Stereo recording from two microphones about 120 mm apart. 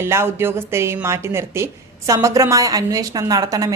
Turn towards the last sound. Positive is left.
turn(degrees=-30)  # may be behind; listen again after turning